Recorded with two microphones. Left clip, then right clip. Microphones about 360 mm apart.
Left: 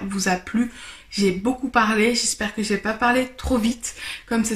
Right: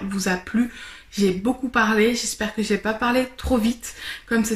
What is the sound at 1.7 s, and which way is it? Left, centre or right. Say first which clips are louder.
Speech: even; centre.